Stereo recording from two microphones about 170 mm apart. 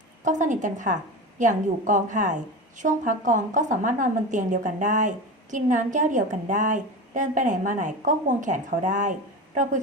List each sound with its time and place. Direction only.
0.3 s a woman's voice: 50° right (ahead or behind)